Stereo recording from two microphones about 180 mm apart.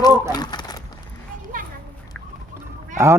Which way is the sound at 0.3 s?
20° left (ahead or behind).